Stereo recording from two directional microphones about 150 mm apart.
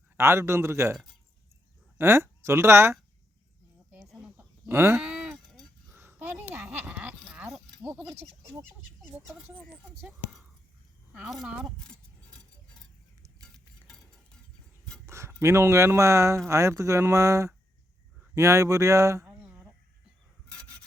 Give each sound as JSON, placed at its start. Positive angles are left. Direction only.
{"t": 0.2, "sound": "a man's voice", "side_deg": -20}
{"t": 2.0, "sound": "speech", "side_deg": -15}
{"t": 3.9, "sound": "livestock", "side_deg": -5}
{"t": 4.9, "sound": "moo", "side_deg": -5}
{"t": 5.9, "sound": "a sound", "side_deg": -15}
{"t": 7.9, "sound": "a man's voice", "side_deg": -10}
{"t": 10.0, "sound": "speech", "side_deg": -5}
{"t": 13.8, "sound": "a sound", "side_deg": 0}
{"t": 15.0, "sound": "a sound", "side_deg": -20}
{"t": 15.4, "sound": "speech", "side_deg": -20}